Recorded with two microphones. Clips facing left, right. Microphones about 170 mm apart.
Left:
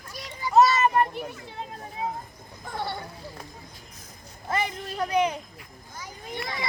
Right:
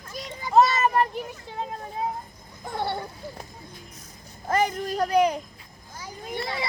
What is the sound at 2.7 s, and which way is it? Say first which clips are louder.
Speech: right 3 dB; 25° right (ahead or behind).